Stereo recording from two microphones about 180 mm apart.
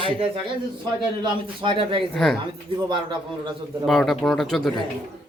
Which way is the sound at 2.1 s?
5° left (ahead or behind).